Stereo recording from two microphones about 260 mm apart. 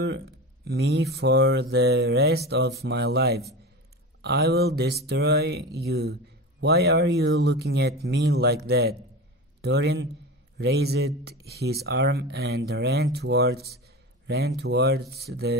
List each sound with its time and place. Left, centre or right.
0.7 s speech: right